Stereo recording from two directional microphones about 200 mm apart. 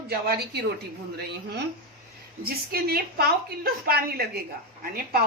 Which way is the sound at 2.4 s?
50° right (ahead or behind).